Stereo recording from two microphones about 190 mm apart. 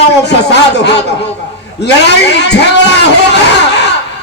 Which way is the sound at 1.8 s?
65° left (ahead or behind).